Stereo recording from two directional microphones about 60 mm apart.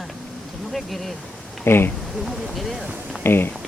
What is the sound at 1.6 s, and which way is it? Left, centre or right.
Speech, left.